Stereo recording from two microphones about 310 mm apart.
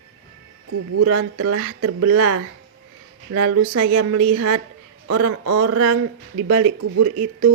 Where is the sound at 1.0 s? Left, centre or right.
Right.